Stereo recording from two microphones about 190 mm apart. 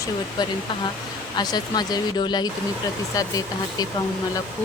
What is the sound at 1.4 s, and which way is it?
Speech, 20° left (ahead or behind).